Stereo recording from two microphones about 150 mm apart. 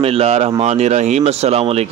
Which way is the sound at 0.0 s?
40° right (ahead or behind).